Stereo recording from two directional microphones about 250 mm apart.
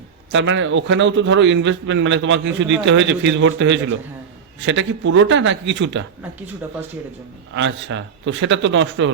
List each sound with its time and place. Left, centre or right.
0.3 s a man's voice: right
7.5 s a man's voice: right